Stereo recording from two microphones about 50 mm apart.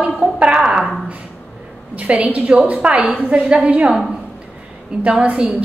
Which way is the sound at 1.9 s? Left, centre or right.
Right.